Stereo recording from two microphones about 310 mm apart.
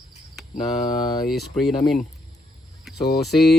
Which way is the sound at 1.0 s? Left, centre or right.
Centre.